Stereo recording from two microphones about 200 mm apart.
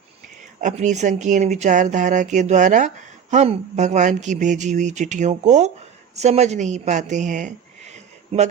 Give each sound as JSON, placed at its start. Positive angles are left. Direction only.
{"t": 0.6, "sound": "a woman's voice", "side_deg": -35}